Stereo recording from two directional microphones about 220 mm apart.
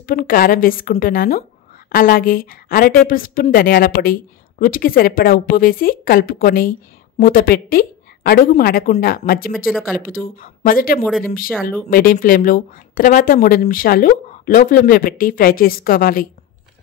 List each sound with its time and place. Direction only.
0.0 s a woman's voice: 40° left (ahead or behind)